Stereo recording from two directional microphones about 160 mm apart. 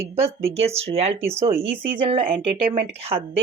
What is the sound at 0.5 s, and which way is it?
A woman's voice, 40° right (ahead or behind).